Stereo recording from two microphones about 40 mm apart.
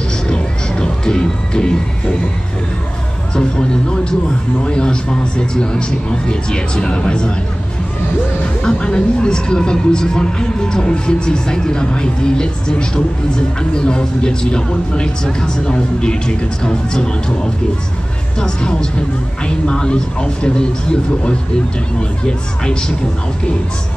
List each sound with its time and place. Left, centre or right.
0.3 s music: centre
3.3 s speech: centre
8.6 s speech: left
22.2 s speech: centre